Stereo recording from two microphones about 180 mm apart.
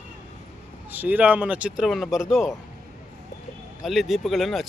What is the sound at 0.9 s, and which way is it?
Speech, 10° right (ahead or behind).